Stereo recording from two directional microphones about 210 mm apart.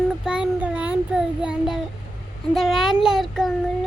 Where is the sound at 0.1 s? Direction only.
5° right (ahead or behind).